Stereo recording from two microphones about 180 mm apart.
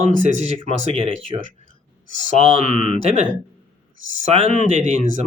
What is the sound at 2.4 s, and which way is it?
Speech, 35° right (ahead or behind).